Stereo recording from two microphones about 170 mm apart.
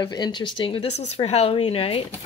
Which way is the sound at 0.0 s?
25° left (ahead or behind).